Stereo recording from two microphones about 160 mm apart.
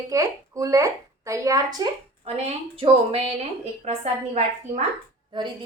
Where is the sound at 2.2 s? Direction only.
40° right (ahead or behind).